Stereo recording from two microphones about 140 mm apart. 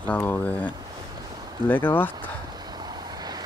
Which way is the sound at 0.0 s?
10° left (ahead or behind).